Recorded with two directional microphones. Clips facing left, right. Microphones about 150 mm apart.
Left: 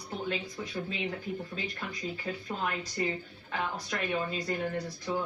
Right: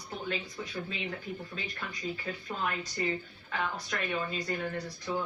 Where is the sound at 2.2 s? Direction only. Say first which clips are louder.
Left 2 dB; 15° left (ahead or behind).